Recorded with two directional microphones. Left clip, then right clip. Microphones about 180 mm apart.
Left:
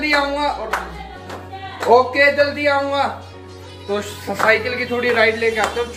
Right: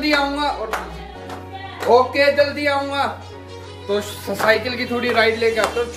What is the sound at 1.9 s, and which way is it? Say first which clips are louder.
Speech: left 1 dB; 15° right (ahead or behind).